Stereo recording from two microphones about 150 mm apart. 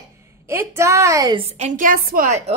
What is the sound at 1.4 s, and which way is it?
A woman's voice, 45° right (ahead or behind).